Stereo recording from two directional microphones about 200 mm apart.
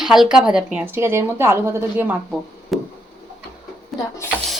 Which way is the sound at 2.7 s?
Centre (ahead or behind).